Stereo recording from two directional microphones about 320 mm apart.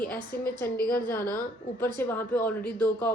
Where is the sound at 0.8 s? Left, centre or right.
Left.